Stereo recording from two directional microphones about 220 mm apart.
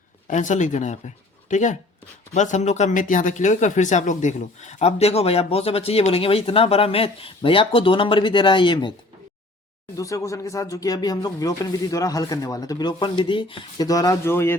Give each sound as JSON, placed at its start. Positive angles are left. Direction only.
{"t": 0.3, "sound": "speech", "side_deg": 35}
{"t": 9.9, "sound": "speech", "side_deg": 15}